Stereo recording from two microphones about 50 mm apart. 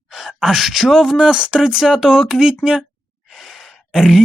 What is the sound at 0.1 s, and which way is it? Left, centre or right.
Speech, centre.